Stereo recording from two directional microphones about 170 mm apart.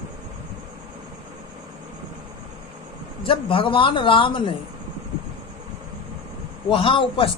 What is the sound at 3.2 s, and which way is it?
A man's voice, 30° left (ahead or behind).